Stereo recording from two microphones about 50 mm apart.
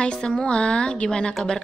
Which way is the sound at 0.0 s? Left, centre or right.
Centre.